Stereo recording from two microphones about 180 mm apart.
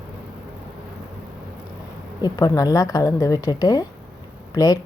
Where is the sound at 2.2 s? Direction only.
20° left (ahead or behind).